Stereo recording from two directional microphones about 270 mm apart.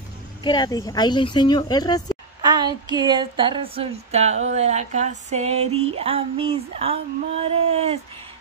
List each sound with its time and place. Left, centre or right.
0.4 s speech: centre
2.4 s speech: centre